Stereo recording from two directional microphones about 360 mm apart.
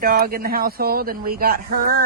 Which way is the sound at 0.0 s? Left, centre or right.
Right.